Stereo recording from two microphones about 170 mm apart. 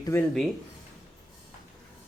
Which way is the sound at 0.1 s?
15° left (ahead or behind).